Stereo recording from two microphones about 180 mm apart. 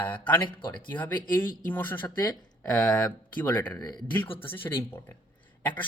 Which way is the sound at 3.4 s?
10° left (ahead or behind).